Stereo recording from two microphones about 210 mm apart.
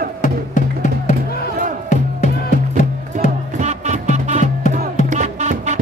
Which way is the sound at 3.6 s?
35° right (ahead or behind).